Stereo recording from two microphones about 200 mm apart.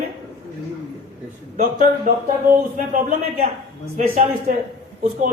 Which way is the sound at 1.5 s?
40° right (ahead or behind).